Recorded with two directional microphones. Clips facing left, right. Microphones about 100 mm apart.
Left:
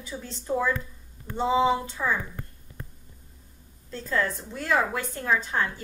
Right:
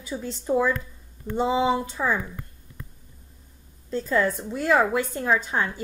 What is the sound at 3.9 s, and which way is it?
A woman's voice, 15° right (ahead or behind).